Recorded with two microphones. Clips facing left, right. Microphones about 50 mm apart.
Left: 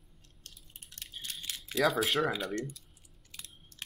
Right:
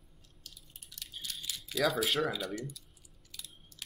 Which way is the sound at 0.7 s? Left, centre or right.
Centre.